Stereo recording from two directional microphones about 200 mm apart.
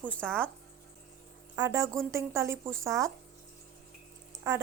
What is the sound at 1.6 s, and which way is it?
Speech, 15° right (ahead or behind).